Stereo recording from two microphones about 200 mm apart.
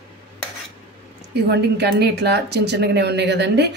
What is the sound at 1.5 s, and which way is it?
Speech, 55° right (ahead or behind).